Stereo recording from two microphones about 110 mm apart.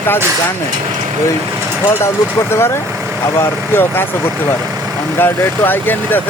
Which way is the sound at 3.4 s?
20° left (ahead or behind).